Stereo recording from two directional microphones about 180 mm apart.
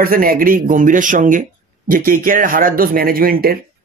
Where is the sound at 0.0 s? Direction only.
55° right (ahead or behind).